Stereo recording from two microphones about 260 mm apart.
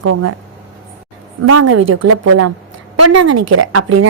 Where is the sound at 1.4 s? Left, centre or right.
Right.